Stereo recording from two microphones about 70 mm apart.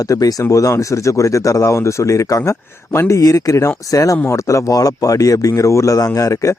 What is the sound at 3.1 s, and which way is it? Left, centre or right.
Speech, left.